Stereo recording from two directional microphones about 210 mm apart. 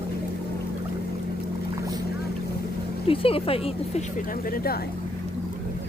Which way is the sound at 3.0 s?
25° left (ahead or behind).